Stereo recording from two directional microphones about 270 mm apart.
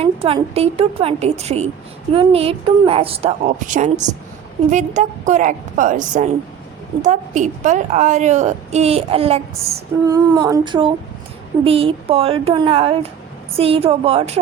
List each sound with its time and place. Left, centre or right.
0.0 s a woman's voice: right
9.7 s female singing: centre
11.6 s a woman's voice: right